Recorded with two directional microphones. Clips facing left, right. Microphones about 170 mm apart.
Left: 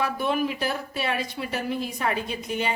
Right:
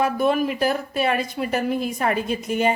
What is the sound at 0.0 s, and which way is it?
Speech, 50° right (ahead or behind).